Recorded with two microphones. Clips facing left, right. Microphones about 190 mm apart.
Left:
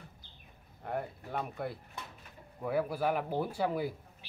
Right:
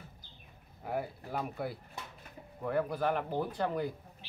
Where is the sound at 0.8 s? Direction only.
5° right (ahead or behind).